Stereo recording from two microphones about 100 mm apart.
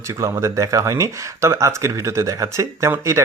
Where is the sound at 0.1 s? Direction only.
30° right (ahead or behind).